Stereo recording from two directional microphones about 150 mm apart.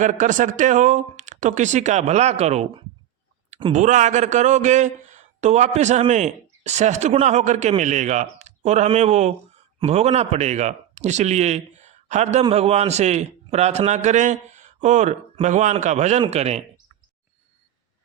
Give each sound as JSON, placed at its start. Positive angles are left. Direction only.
{"t": 0.0, "sound": "speech", "side_deg": -55}
{"t": 3.7, "sound": "speech", "side_deg": -55}